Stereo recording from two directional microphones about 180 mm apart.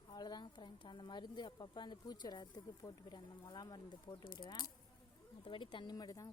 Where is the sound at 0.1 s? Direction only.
25° left (ahead or behind).